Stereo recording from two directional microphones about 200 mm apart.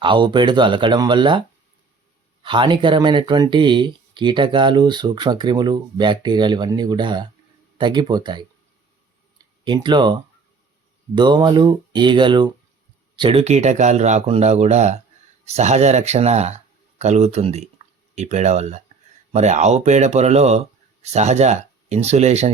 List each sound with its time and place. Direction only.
0.0 s speech: 25° right (ahead or behind)